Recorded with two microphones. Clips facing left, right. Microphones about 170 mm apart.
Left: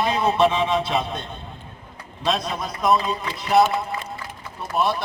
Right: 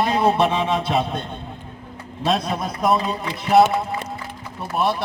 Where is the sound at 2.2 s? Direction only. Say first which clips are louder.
Right 3 dB; 55° right (ahead or behind).